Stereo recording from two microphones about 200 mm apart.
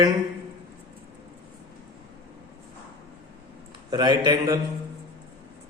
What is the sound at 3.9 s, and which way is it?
Speech, 20° right (ahead or behind).